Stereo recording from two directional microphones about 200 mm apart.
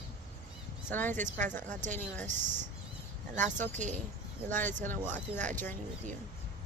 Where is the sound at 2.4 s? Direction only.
40° right (ahead or behind).